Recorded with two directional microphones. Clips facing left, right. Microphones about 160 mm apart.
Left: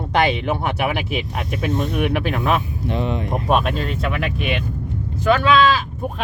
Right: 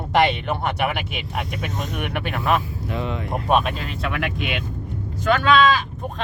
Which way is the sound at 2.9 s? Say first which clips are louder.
Left 4 dB; 20° left (ahead or behind).